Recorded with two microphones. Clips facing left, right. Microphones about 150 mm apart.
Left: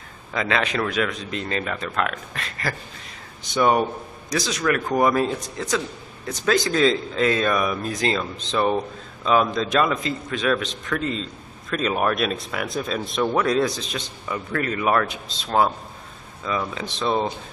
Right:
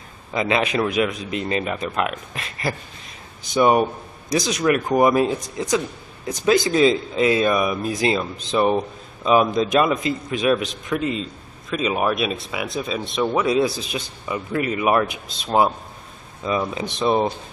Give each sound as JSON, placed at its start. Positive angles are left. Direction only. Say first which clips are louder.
{"t": 0.3, "sound": "speech", "louder": "right 3 dB", "side_deg": -15}